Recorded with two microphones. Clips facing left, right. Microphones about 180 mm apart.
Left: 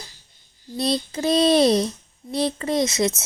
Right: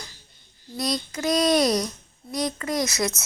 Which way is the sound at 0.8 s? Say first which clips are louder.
Left 4 dB; 30° left (ahead or behind).